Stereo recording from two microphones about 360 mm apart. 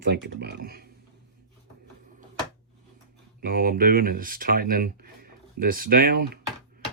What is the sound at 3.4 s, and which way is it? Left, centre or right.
Speech, right.